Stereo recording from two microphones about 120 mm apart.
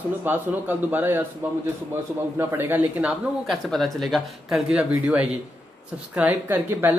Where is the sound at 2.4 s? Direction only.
15° right (ahead or behind).